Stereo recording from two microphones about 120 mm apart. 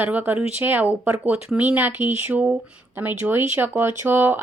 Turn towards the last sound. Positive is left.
turn(degrees=-15)  # may be behind; listen again after turning